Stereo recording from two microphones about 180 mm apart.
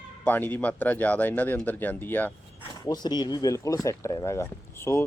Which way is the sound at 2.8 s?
20° left (ahead or behind).